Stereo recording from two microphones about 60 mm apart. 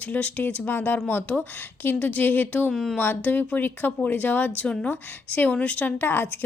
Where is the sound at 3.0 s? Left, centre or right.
Left.